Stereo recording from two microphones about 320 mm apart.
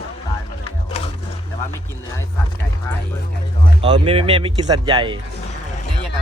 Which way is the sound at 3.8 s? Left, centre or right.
Centre.